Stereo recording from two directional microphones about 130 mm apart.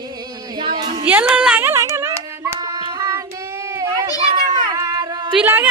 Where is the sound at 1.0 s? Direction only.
10° right (ahead or behind).